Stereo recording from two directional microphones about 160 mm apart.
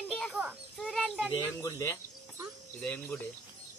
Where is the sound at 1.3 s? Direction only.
20° left (ahead or behind).